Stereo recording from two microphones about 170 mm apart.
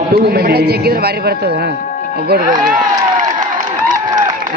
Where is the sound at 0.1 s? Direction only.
65° right (ahead or behind).